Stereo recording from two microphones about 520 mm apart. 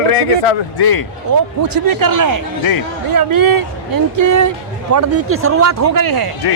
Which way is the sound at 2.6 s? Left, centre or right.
Left.